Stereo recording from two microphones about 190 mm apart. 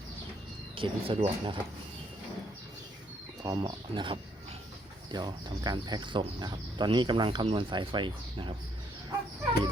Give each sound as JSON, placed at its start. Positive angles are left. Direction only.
{"t": 0.8, "sound": "speech", "side_deg": -30}
{"t": 3.4, "sound": "speech", "side_deg": -20}